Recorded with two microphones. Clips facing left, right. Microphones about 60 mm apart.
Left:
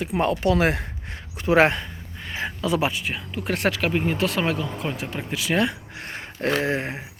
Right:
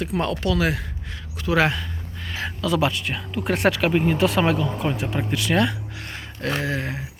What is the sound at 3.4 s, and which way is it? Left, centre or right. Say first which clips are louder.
Speech: right 3 dB; centre.